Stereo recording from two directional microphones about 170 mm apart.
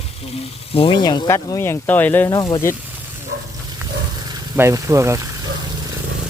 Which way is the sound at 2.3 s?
20° left (ahead or behind).